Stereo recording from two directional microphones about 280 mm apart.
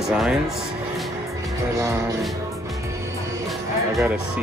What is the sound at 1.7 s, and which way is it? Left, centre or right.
Music, centre.